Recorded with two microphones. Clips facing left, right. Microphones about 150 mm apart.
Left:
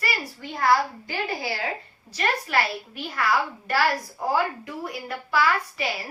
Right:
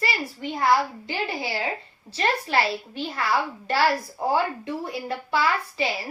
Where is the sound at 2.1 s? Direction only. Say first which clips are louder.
Right 1 dB; 25° right (ahead or behind).